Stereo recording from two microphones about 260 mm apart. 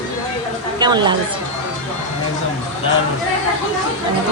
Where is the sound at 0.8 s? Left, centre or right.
Centre.